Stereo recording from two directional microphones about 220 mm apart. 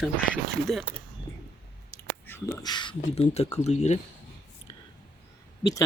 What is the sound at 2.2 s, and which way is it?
Speech, 10° left (ahead or behind).